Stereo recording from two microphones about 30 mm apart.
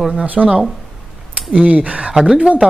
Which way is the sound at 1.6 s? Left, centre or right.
Right.